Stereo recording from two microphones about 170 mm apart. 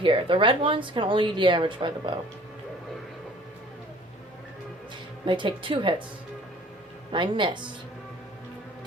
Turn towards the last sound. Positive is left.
turn(degrees=-30)  # may be behind; listen again after turning